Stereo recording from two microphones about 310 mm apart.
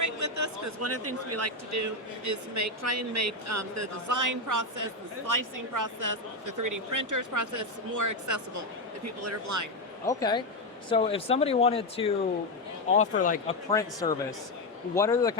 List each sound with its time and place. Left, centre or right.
0.0 s speech: right
10.1 s speech: centre
13.7 s speech: centre